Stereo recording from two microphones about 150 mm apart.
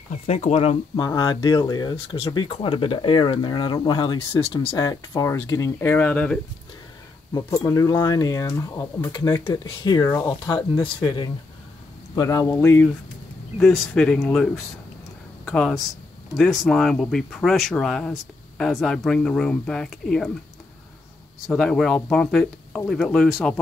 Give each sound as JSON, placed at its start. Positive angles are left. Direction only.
{"t": 0.3, "sound": "speech", "side_deg": 45}
{"t": 0.9, "sound": "speech", "side_deg": 25}
{"t": 4.7, "sound": "speech", "side_deg": 25}
{"t": 7.3, "sound": "speech", "side_deg": 20}
{"t": 13.6, "sound": "speech", "side_deg": 0}
{"t": 21.5, "sound": "speech", "side_deg": 0}